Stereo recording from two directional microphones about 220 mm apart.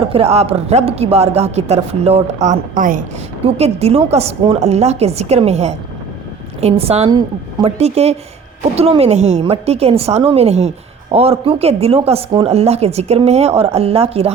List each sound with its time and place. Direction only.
0.1 s a woman's voice: 25° right (ahead or behind)